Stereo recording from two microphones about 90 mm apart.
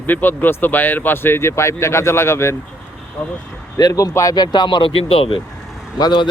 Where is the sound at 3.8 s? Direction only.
45° left (ahead or behind).